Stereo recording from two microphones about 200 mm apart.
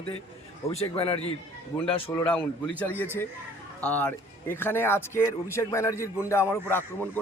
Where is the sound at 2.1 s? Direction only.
5° left (ahead or behind).